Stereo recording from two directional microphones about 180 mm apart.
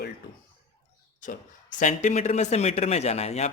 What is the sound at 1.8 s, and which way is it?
Speech, 45° left (ahead or behind).